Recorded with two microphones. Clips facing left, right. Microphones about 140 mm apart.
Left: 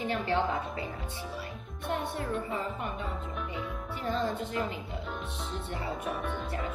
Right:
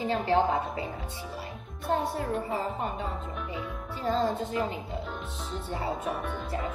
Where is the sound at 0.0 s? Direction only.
30° right (ahead or behind).